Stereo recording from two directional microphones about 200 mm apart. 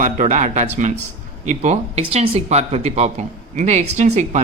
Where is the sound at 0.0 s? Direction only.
40° right (ahead or behind).